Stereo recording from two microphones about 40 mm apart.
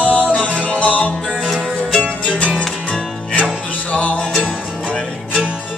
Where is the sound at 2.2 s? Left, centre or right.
Left.